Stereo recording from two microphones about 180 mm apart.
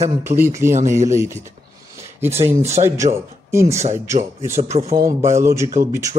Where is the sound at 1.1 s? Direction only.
15° right (ahead or behind).